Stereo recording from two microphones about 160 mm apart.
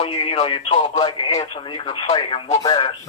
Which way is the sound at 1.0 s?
35° left (ahead or behind).